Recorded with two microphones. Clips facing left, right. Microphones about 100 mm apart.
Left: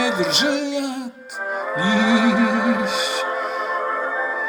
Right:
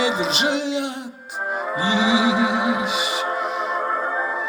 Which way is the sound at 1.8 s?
10° right (ahead or behind).